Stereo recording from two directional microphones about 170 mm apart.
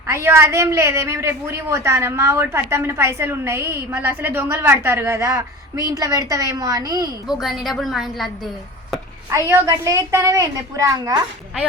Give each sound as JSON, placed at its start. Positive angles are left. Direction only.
{"t": 0.1, "sound": "a woman's voice", "side_deg": -15}
{"t": 7.3, "sound": "a woman's voice", "side_deg": 0}
{"t": 9.3, "sound": "a woman's voice", "side_deg": -20}